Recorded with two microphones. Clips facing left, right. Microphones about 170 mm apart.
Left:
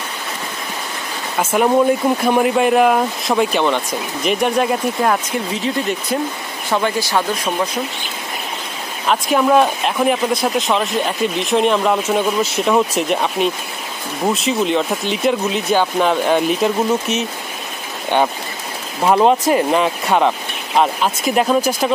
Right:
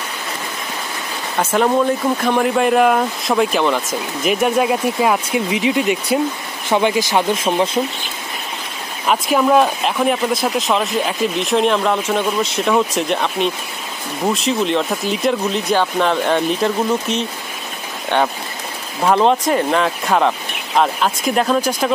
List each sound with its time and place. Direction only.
1.4 s speech: 10° left (ahead or behind); by 7.8 s 25° right (ahead or behind)
9.0 s speech: 5° right (ahead or behind)
19.0 s speech: 5° left (ahead or behind)